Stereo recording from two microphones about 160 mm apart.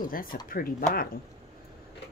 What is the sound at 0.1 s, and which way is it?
Speech, 65° left (ahead or behind).